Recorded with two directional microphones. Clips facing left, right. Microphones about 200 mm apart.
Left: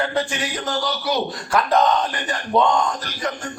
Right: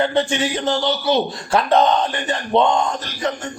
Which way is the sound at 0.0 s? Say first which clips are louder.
Right 5 dB; 25° right (ahead or behind).